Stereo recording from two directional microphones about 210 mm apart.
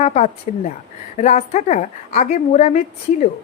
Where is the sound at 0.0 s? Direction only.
30° left (ahead or behind).